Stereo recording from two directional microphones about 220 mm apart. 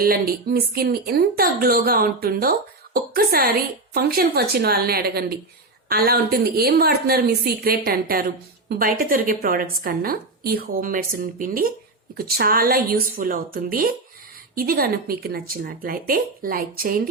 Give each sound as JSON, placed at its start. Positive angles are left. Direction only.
{"t": 0.0, "sound": "a woman's voice", "side_deg": -45}